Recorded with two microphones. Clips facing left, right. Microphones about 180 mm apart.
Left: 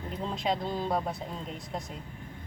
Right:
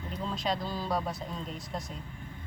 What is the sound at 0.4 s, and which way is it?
Speech, 20° left (ahead or behind).